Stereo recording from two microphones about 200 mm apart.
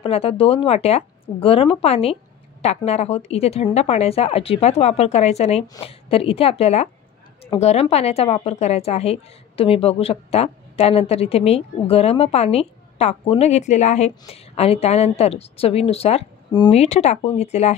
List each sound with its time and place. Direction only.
0.0 s speech: 30° left (ahead or behind)